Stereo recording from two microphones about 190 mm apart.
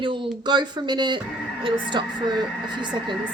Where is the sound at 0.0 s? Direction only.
25° right (ahead or behind).